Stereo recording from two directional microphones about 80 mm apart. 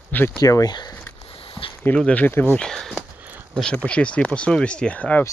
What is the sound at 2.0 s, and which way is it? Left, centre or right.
Speech, centre.